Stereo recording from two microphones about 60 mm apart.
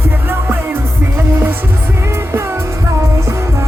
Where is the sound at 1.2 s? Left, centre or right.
Right.